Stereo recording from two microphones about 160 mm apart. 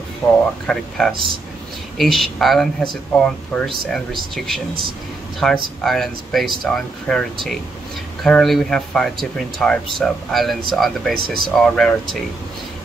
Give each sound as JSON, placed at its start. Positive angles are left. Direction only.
{"t": 0.2, "sound": "speech", "side_deg": 15}
{"t": 0.7, "sound": "speech", "side_deg": 5}